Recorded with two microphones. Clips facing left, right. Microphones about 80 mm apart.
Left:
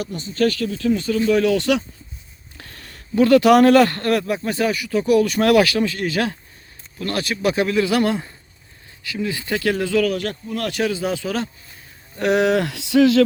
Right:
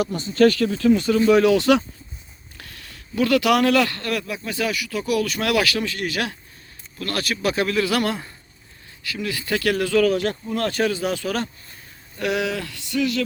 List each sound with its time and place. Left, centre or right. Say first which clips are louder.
0.3 s speech: right 3 dB; right
1.4 s speech: right 2 dB; centre
2.6 s a man's voice: left 1 dB; left
10.0 s speech: right 2 dB; centre
10.9 s speech: left 1 dB; centre
12.1 s a sound: left 7 dB; left